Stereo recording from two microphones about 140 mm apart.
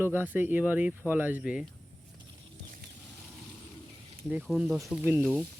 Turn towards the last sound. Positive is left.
turn(degrees=-15)  # may be behind; listen again after turning